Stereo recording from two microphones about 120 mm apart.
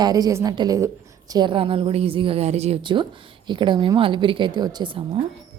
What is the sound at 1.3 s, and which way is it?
A woman's voice, 45° right (ahead or behind).